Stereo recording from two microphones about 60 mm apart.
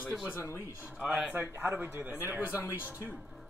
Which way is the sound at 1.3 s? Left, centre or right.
Right.